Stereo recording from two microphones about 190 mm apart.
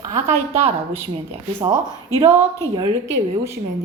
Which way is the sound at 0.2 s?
35° right (ahead or behind).